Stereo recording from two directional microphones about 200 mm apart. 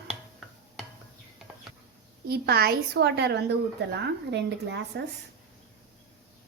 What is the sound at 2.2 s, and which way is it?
A woman's voice, 50° right (ahead or behind).